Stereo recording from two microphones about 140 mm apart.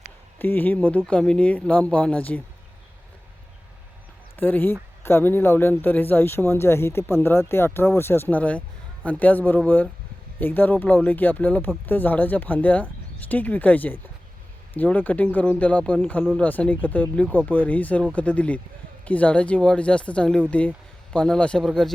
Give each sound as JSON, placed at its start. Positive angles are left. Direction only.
{"t": 0.3, "sound": "speech", "side_deg": 15}
{"t": 4.4, "sound": "speech", "side_deg": 15}